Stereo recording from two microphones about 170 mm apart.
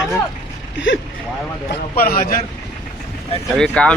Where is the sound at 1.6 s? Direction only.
60° left (ahead or behind).